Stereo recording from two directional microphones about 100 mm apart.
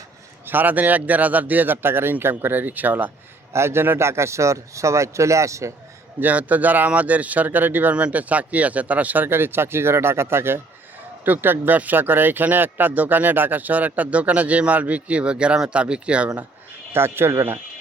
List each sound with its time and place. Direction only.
0.4 s speech: 20° right (ahead or behind)
6.1 s speech: 15° right (ahead or behind)
16.9 s speech: 25° right (ahead or behind)